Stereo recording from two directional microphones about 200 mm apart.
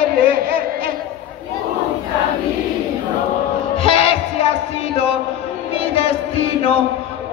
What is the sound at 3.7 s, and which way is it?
Music, 30° left (ahead or behind).